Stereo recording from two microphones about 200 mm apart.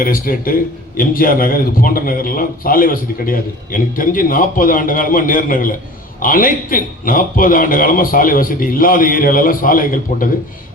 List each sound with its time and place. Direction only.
0.0 s a man's voice: 45° left (ahead or behind)